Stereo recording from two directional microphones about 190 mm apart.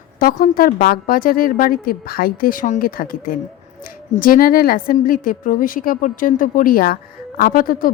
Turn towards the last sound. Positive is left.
turn(degrees=50)  # may be behind; listen again after turning